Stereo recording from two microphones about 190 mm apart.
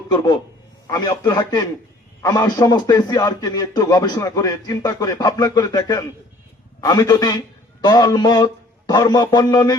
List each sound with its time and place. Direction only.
0.1 s speech: 20° left (ahead or behind)